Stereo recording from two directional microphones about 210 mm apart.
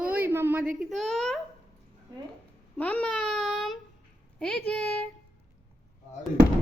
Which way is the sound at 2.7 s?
5° left (ahead or behind).